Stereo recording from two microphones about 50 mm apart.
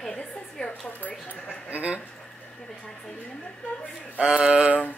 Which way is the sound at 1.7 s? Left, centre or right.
Right.